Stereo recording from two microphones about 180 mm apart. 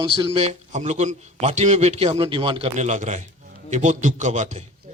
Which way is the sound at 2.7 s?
40° right (ahead or behind).